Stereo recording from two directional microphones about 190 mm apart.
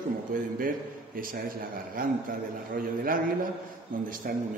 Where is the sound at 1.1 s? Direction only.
50° right (ahead or behind).